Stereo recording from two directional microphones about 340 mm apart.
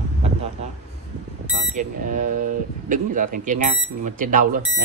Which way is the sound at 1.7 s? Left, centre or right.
Right.